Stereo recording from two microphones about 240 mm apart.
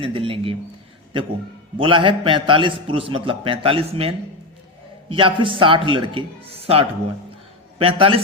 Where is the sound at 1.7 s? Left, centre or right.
Right.